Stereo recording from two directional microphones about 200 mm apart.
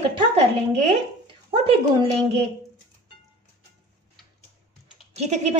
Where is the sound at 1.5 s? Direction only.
30° right (ahead or behind).